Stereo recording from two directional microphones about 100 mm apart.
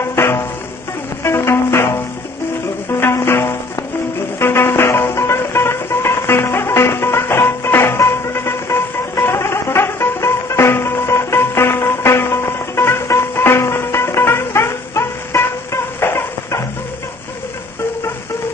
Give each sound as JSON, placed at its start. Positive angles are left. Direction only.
{"t": 0.0, "sound": "music", "side_deg": 25}
{"t": 2.9, "sound": "music", "side_deg": 25}